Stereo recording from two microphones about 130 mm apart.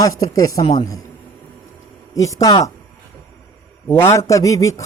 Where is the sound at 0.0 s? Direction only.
25° left (ahead or behind).